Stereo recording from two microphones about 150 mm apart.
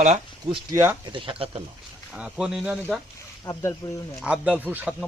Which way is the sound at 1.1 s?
35° right (ahead or behind).